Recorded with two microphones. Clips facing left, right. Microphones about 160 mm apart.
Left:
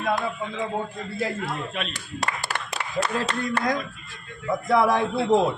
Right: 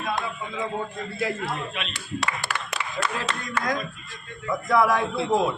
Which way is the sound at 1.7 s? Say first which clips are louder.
Even; 45° left (ahead or behind).